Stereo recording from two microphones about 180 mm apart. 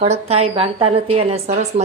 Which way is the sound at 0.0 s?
35° right (ahead or behind).